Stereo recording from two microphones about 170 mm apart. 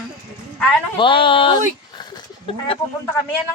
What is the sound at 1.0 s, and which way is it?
Speech, 30° left (ahead or behind).